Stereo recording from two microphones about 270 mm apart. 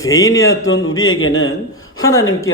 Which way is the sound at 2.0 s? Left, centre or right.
Centre.